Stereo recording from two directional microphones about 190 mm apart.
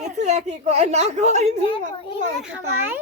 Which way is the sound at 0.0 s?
40° right (ahead or behind).